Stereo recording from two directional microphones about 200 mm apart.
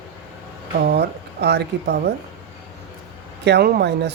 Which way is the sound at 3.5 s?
50° right (ahead or behind).